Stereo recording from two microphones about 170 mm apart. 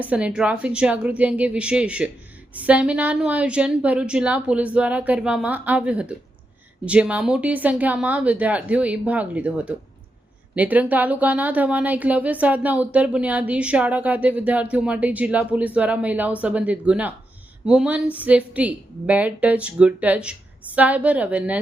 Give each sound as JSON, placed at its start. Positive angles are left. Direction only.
{"t": 0.0, "sound": "speech", "side_deg": -10}